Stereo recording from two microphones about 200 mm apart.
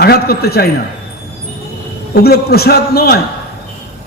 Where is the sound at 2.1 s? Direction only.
50° left (ahead or behind).